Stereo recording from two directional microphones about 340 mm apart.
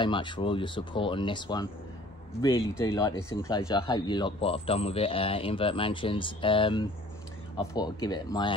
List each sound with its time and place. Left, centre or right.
0.0 s speech: centre
2.9 s speech: centre